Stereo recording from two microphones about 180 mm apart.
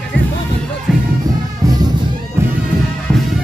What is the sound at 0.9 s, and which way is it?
Music, centre (ahead or behind).